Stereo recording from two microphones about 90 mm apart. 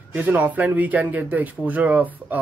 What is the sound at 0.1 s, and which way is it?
Speech, 20° right (ahead or behind).